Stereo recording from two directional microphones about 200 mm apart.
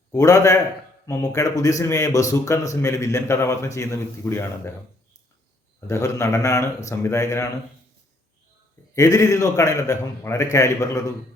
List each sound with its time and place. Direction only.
0.1 s a man's voice: 15° left (ahead or behind)
5.9 s a man's voice: 15° left (ahead or behind)
9.0 s a man's voice: 15° left (ahead or behind)